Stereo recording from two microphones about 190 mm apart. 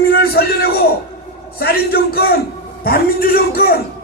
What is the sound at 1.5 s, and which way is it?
A man's voice, 55° left (ahead or behind).